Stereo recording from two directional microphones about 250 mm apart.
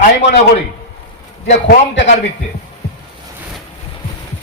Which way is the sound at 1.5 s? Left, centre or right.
Left.